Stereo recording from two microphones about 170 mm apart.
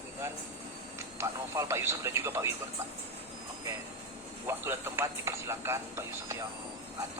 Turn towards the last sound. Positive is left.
turn(degrees=-15)  # may be behind; listen again after turning